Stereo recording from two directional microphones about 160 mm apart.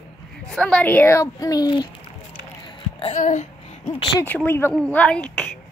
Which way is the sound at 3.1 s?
50° left (ahead or behind).